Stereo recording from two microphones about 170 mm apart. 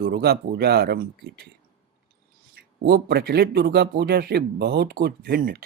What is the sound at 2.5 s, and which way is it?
Speech, 80° right.